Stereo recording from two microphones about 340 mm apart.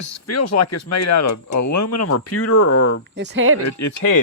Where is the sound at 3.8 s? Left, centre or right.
Left.